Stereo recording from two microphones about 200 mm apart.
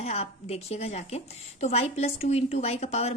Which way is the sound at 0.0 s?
30° left (ahead or behind).